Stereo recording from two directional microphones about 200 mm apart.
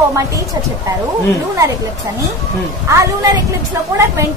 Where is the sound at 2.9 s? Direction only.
15° right (ahead or behind).